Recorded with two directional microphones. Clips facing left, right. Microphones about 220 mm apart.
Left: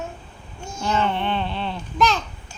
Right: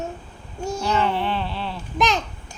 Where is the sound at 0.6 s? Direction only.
35° right (ahead or behind).